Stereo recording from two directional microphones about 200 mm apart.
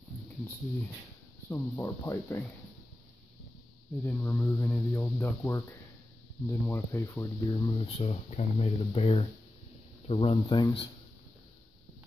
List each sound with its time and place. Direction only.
1.5 s speech: 10° left (ahead or behind)
4.0 s speech: 10° left (ahead or behind)